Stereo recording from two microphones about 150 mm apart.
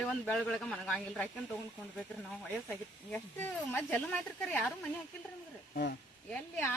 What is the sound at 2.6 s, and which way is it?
Speech, 10° left (ahead or behind).